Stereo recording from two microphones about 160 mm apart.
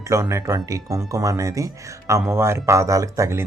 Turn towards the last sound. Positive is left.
turn(degrees=-20)  # may be behind; listen again after turning